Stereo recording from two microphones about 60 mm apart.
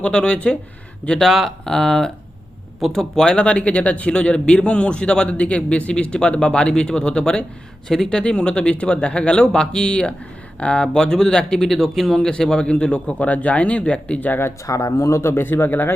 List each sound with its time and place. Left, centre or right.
0.0 s speech: centre
1.2 s speech: centre; by 14.3 s left
14.7 s speech: left